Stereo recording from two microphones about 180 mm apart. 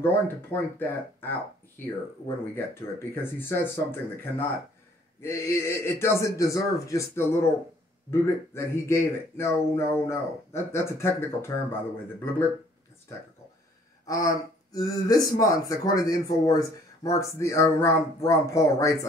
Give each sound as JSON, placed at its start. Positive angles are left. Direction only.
{"t": 0.0, "sound": "speech", "side_deg": 10}
{"t": 14.0, "sound": "speech", "side_deg": 20}